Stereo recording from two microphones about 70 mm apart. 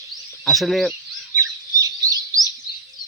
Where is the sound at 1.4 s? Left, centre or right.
Right.